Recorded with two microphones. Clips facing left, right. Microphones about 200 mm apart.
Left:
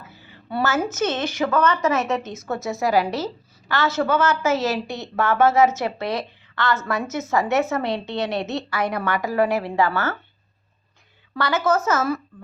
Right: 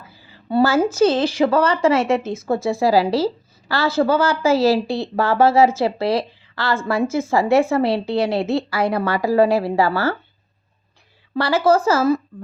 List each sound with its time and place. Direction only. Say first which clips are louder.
0.4 s speech: right 7 dB; 30° right (ahead or behind)
11.3 s speech: right 5 dB; 30° right (ahead or behind)